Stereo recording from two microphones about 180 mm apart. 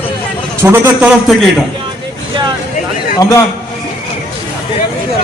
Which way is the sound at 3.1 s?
20° left (ahead or behind).